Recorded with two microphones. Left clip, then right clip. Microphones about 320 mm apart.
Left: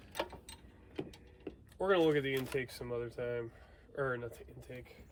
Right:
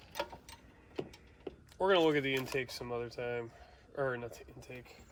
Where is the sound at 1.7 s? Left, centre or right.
Right.